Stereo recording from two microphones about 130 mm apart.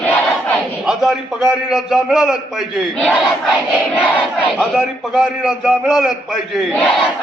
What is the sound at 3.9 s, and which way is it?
Speech, 10° right (ahead or behind).